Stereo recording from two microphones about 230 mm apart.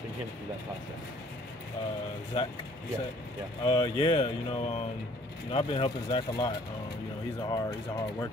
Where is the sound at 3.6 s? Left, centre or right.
Centre.